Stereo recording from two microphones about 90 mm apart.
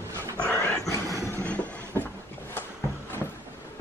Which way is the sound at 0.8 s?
35° left (ahead or behind).